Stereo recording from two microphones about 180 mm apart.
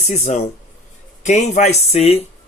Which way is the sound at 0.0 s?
40° left (ahead or behind).